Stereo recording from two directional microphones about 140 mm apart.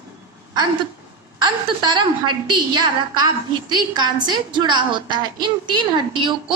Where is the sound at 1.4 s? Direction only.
35° right (ahead or behind).